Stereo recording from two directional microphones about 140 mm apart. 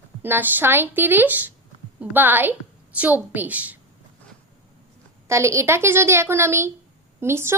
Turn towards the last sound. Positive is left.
turn(degrees=-20)  # may be behind; listen again after turning